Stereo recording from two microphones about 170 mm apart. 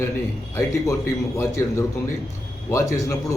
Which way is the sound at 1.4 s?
15° left (ahead or behind).